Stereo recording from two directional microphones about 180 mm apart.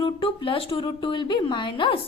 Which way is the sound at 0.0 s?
30° left (ahead or behind).